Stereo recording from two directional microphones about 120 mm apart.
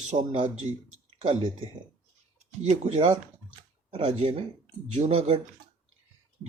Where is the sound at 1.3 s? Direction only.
45° right (ahead or behind).